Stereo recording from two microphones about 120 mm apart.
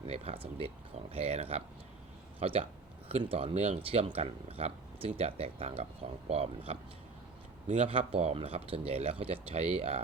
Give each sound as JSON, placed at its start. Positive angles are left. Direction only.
{"t": 1.1, "sound": "speech", "side_deg": -55}